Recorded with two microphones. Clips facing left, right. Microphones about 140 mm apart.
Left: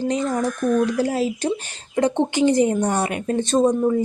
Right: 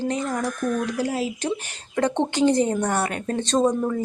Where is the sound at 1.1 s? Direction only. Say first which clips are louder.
Left 4 dB; 35° left (ahead or behind).